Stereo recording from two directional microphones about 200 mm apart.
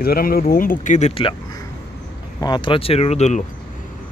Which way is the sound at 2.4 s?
25° left (ahead or behind).